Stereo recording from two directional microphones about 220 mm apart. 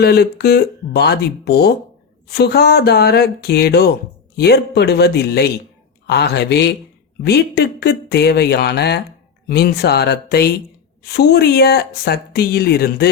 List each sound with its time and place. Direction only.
0.0 s speech: 45° left (ahead or behind)